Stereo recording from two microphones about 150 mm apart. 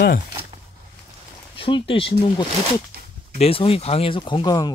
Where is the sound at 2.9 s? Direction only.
90° right.